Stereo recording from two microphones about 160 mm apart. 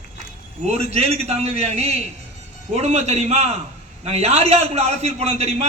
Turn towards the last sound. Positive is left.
turn(degrees=-40)  # may be behind; listen again after turning